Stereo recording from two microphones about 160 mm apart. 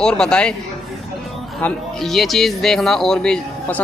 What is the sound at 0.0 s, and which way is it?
Speech, 5° left (ahead or behind).